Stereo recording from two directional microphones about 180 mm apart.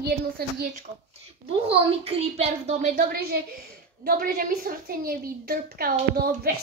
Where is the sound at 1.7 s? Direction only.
35° right (ahead or behind).